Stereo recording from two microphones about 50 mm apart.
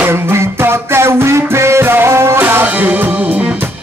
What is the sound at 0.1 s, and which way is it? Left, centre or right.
Music, right.